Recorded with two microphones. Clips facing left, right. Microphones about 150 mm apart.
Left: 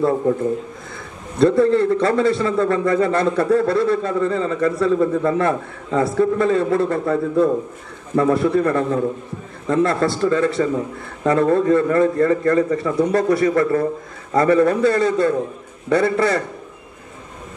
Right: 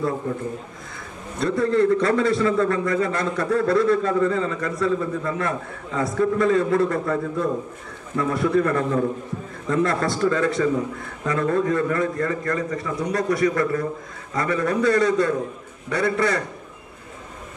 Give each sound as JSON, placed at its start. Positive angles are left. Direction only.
{"t": 1.4, "sound": "a man's voice", "side_deg": 30}